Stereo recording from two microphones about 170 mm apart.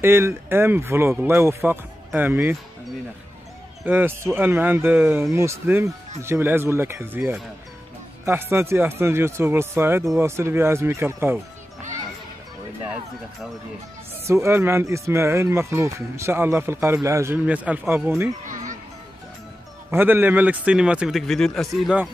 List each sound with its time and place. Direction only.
0.0 s speech: 15° right (ahead or behind)
3.8 s speech: 10° right (ahead or behind)
12.8 s speech: 10° right (ahead or behind)
18.5 s music: 50° right (ahead or behind)
19.9 s speech: 10° right (ahead or behind)